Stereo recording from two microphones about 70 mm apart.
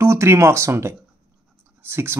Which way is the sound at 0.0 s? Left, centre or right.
Right.